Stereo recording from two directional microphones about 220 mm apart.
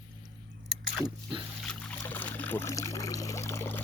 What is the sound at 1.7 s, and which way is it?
Pour, 5° left (ahead or behind).